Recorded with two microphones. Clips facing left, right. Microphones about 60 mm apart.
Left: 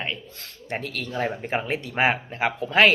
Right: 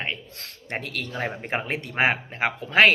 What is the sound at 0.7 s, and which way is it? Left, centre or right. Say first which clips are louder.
Speech: left 1 dB; right.